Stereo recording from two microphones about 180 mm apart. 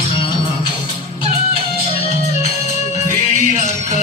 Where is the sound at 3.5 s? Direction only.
40° left (ahead or behind).